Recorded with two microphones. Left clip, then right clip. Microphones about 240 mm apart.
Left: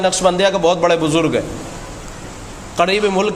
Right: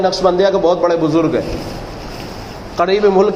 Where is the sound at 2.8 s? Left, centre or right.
Left.